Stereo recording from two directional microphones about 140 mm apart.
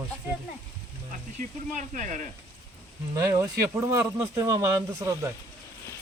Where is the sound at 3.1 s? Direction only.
20° right (ahead or behind).